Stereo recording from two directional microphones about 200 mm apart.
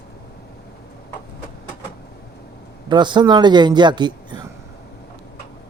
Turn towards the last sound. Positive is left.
turn(degrees=-20)  # may be behind; listen again after turning